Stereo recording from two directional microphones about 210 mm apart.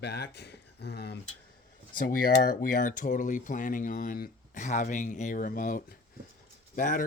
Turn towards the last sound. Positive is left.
turn(degrees=40)  # may be behind; listen again after turning